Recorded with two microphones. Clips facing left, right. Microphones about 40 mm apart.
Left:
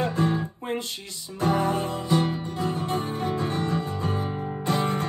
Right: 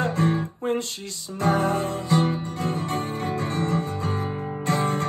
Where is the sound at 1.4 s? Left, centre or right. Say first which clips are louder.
Right 1 dB; right.